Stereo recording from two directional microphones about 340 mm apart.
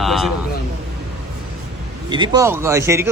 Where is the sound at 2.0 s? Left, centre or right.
Centre.